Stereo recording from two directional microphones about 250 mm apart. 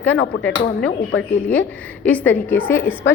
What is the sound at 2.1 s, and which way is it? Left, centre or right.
Speech, centre.